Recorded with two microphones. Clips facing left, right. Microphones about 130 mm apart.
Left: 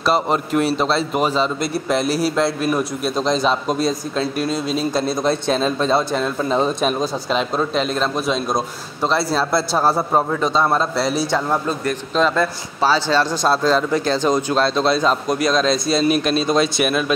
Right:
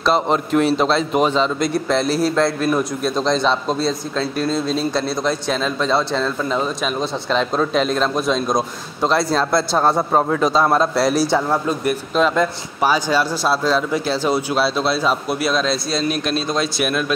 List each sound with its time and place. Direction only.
0.0 s a man's voice: 5° left (ahead or behind)
4.4 s speech: 10° left (ahead or behind)
5.5 s a man's voice: 25° left (ahead or behind); by 17.0 s centre (ahead or behind)